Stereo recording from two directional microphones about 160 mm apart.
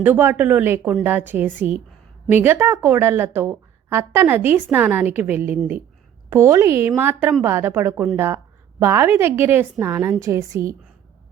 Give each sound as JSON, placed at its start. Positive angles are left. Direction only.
{"t": 0.0, "sound": "a woman's voice", "side_deg": -10}